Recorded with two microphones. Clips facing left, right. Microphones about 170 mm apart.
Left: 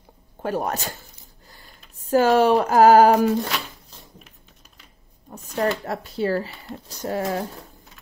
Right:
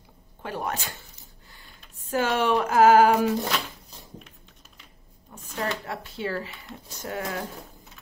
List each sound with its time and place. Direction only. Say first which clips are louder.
0.4 s speech: left 6 dB; 40° left (ahead or behind)
2.0 s speech: left 8 dB; 35° left (ahead or behind)
5.3 s speech: left 7 dB; 40° left (ahead or behind)